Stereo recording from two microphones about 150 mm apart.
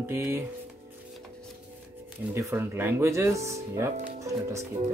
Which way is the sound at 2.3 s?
20° right (ahead or behind).